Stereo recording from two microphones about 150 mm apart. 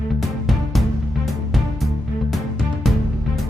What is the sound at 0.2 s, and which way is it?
Music, centre (ahead or behind).